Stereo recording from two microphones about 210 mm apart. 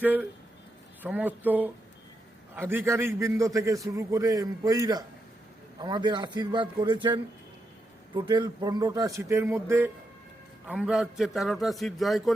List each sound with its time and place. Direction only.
0.0 s a man's voice: 10° right (ahead or behind)